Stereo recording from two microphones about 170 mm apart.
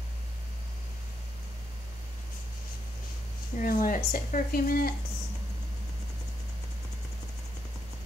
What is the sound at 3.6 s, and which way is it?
Speech, 55° left (ahead or behind).